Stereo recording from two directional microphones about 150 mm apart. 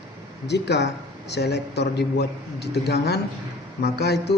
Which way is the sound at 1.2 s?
90° left.